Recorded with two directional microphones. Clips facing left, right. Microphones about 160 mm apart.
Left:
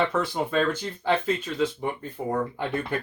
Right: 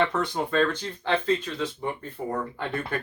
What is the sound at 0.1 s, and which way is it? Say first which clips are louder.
Speech: left 1 dB; centre (ahead or behind).